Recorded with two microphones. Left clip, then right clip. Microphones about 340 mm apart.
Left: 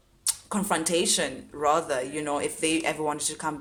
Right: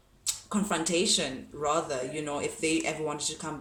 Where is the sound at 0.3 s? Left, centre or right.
Centre.